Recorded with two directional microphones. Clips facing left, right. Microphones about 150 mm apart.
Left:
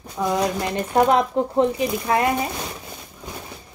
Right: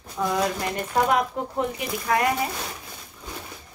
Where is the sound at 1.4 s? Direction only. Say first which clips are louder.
Left 8 dB; 25° left (ahead or behind).